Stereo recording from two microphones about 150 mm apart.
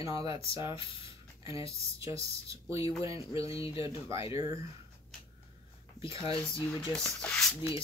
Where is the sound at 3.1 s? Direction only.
40° left (ahead or behind).